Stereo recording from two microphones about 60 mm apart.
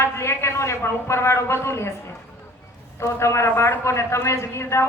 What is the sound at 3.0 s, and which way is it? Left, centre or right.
Speech, left.